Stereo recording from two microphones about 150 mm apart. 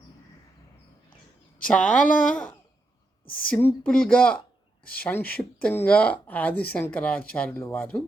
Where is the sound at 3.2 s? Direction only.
75° left (ahead or behind).